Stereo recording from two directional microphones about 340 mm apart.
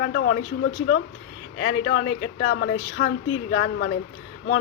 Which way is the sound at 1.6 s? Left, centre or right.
Left.